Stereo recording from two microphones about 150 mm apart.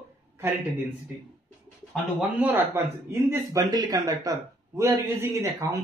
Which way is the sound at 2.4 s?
15° right (ahead or behind).